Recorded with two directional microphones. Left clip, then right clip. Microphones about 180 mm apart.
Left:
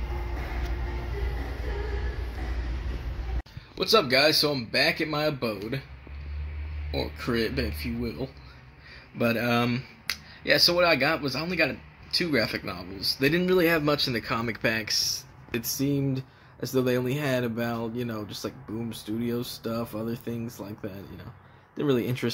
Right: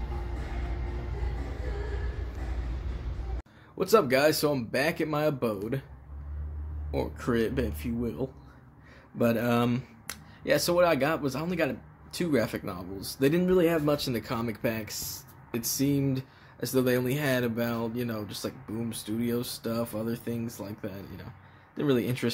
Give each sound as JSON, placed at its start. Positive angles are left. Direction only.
{"t": 3.8, "sound": "speech", "side_deg": -20}
{"t": 6.9, "sound": "speech", "side_deg": -10}